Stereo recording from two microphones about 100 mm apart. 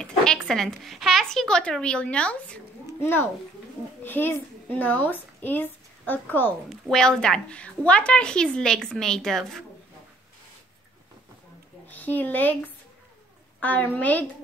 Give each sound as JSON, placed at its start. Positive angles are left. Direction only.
{"t": 0.0, "sound": "a woman's voice", "side_deg": 5}
{"t": 3.0, "sound": "a child's voice", "side_deg": 20}
{"t": 6.7, "sound": "a woman's voice", "side_deg": 5}
{"t": 11.9, "sound": "speech", "side_deg": 20}
{"t": 13.6, "sound": "a woman's voice", "side_deg": 15}